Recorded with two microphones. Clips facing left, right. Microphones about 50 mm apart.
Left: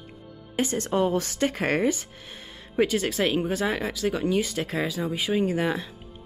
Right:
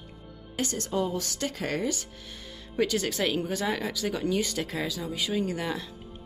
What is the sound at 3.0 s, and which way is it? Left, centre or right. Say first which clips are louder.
Speech: left 3 dB; centre.